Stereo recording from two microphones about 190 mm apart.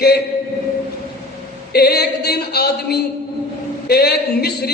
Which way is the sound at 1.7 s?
55° left (ahead or behind).